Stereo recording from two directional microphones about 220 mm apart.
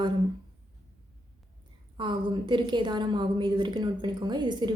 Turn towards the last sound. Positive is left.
turn(degrees=-20)  # may be behind; listen again after turning